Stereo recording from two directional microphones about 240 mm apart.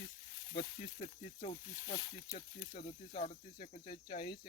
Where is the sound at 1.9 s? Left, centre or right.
Left.